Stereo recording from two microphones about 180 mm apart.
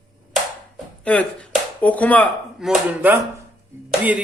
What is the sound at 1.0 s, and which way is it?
Speech, 5° left (ahead or behind).